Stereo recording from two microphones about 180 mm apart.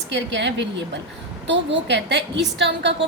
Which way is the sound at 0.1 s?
85° right.